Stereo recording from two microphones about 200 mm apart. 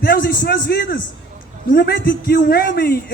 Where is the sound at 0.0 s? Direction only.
50° left (ahead or behind).